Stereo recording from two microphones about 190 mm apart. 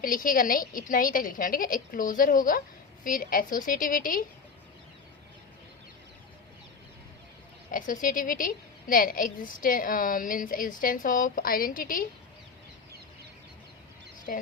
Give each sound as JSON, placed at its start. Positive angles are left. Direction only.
{"t": 0.0, "sound": "a woman's voice", "side_deg": 45}
{"t": 7.7, "sound": "a woman's voice", "side_deg": 45}
{"t": 14.3, "sound": "a woman's voice", "side_deg": 55}